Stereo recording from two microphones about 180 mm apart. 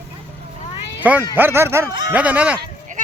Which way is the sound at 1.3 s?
10° right (ahead or behind).